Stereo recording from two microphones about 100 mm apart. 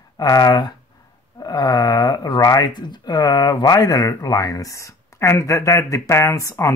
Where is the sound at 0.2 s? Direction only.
40° left (ahead or behind).